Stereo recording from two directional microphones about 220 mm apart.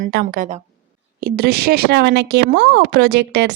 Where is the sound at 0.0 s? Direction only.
45° right (ahead or behind).